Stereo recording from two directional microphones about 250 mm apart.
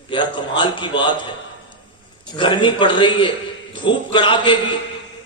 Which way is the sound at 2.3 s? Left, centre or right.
Centre.